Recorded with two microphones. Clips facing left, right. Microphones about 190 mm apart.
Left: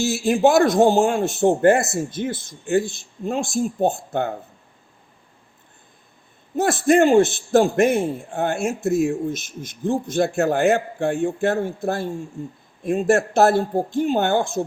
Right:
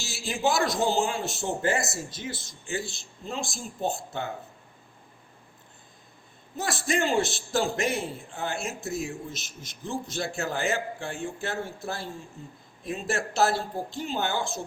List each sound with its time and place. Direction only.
0.0 s a man's voice: 55° left (ahead or behind)
6.6 s a man's voice: 55° left (ahead or behind)